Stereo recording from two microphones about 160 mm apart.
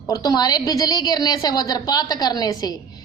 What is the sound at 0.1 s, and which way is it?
A woman's voice, 25° left (ahead or behind).